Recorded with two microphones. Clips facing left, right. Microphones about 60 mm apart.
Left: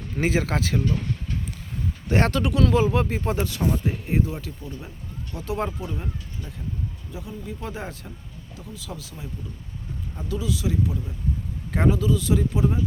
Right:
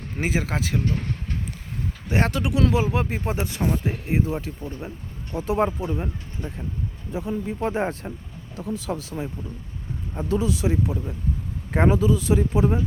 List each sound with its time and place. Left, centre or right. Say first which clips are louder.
0.2 s speech: left 2 dB; centre
0.8 s vehicle: left 1 dB; right
2.0 s speech: left 1 dB; centre
7.1 s speech: right 7 dB; right